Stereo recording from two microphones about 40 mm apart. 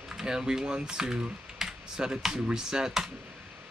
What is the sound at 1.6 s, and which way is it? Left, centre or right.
Computer keyboard, centre.